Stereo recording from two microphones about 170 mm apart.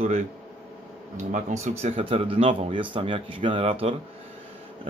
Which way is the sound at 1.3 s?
45° right (ahead or behind).